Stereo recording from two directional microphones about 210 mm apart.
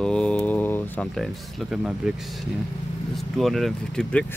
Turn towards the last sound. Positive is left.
turn(degrees=5)  # may be behind; listen again after turning